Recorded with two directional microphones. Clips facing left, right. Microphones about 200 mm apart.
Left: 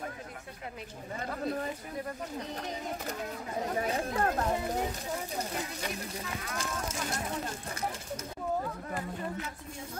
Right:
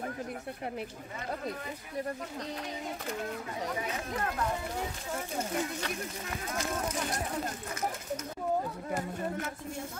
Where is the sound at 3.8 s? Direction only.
35° left (ahead or behind).